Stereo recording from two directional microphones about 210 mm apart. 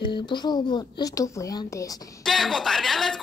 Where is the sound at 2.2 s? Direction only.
Centre (ahead or behind).